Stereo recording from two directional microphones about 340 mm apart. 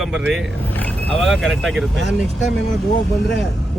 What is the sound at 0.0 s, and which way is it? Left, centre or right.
Speech, centre.